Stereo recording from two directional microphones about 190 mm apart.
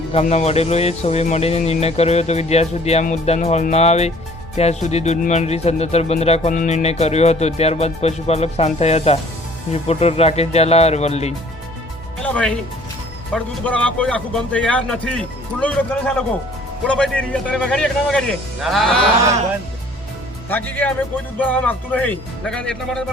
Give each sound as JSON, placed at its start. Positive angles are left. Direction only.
{"t": 0.1, "sound": "speech", "side_deg": 35}
{"t": 12.2, "sound": "speech", "side_deg": 5}
{"t": 20.5, "sound": "speech", "side_deg": 10}